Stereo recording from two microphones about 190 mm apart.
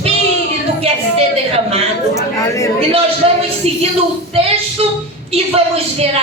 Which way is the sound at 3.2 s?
30° right (ahead or behind).